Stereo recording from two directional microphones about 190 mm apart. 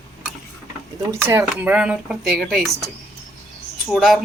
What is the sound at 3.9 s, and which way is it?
Speech, centre (ahead or behind).